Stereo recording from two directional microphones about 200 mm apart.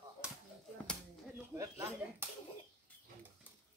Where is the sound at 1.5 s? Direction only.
10° right (ahead or behind).